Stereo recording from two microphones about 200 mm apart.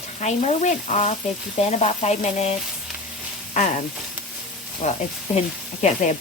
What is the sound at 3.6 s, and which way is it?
Sizzle, 40° left (ahead or behind).